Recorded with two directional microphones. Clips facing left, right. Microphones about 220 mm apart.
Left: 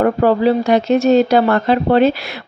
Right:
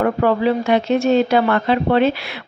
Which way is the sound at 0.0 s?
35° left (ahead or behind).